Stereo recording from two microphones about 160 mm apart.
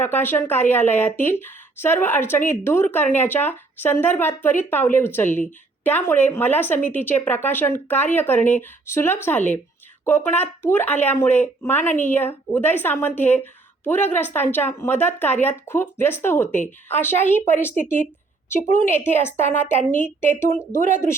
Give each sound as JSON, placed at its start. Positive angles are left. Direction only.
{"t": 0.0, "sound": "speech", "side_deg": 15}